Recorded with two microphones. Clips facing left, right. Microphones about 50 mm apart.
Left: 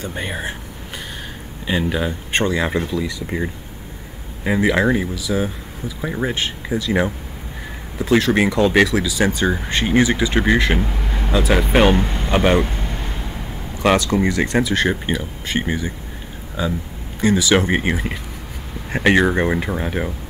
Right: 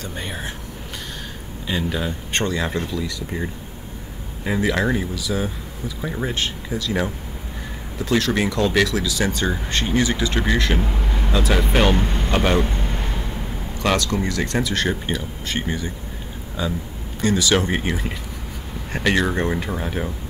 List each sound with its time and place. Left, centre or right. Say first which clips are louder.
0.0 s speech: left 4 dB; centre
1.7 s speech: left 4 dB; centre
3.3 s speech: left 3 dB; left
12.0 s speech: left 2 dB; centre
12.4 s speech: left 4 dB; centre
12.6 s a sound: right 1 dB; centre
13.7 s speech: left 5 dB; centre